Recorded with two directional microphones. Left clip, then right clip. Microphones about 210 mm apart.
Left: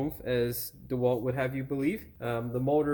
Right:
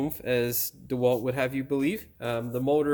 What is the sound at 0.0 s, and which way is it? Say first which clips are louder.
Speech: right 3 dB; 40° right (ahead or behind).